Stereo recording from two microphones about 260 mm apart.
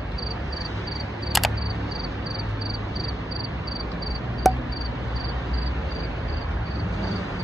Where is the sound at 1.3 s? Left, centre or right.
Centre.